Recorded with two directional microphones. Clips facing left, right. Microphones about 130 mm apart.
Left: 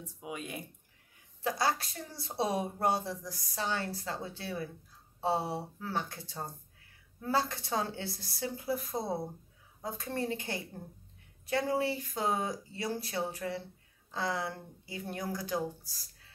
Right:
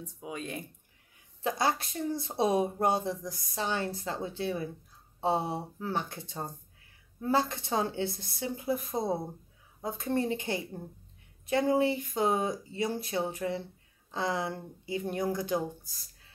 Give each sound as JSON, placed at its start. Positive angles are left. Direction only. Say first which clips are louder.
{"t": 0.2, "sound": "speech", "louder": "right 2 dB", "side_deg": 10}
{"t": 1.4, "sound": "speech", "louder": "right 2 dB", "side_deg": -20}